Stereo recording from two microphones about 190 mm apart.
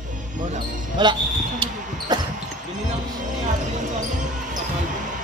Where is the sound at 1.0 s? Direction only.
25° right (ahead or behind).